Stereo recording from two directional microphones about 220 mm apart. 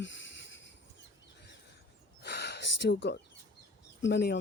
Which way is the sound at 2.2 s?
50° left (ahead or behind).